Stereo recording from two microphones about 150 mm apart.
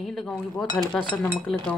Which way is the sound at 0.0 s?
Centre (ahead or behind).